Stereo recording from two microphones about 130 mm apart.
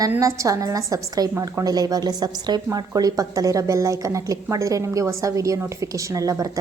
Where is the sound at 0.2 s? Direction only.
25° right (ahead or behind).